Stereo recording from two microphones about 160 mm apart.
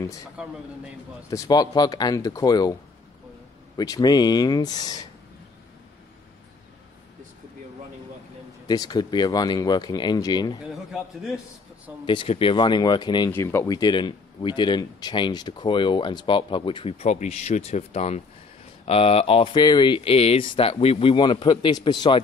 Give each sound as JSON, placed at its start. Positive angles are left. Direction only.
{"t": 0.4, "sound": "a man's voice", "side_deg": -5}
{"t": 1.3, "sound": "speech", "side_deg": 20}
{"t": 3.7, "sound": "speech", "side_deg": 25}
{"t": 8.6, "sound": "speech", "side_deg": 25}
{"t": 10.6, "sound": "a man's voice", "side_deg": 0}
{"t": 12.1, "sound": "speech", "side_deg": 35}
{"t": 13.3, "sound": "speech", "side_deg": 15}